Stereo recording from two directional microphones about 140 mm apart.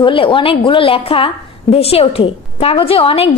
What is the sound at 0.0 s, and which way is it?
A woman's voice, 40° left (ahead or behind).